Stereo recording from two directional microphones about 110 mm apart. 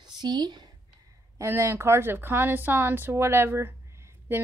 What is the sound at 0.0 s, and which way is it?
Speech, 40° right (ahead or behind).